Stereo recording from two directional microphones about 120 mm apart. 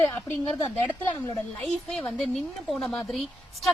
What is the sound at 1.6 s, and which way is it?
A woman's voice, 10° left (ahead or behind).